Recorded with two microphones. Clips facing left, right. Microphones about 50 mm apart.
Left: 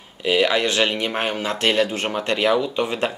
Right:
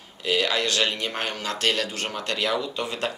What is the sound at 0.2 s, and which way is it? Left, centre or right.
Speech, left.